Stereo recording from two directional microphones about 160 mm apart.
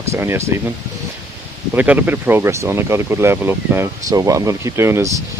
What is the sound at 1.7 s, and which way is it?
Speech, 10° right (ahead or behind).